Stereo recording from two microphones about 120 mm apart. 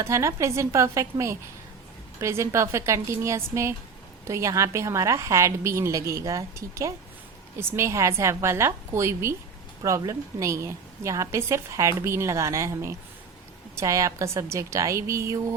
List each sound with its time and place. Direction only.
0.0 s a woman's voice: 25° right (ahead or behind)